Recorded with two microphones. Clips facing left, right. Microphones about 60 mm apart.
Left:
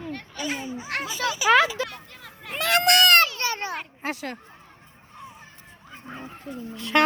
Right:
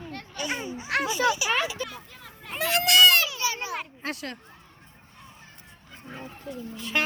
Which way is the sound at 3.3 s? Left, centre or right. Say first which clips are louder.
Left 2 dB; left.